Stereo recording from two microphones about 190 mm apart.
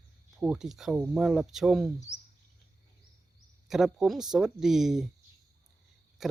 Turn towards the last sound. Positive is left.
turn(degrees=0)  # may be behind; listen again after turning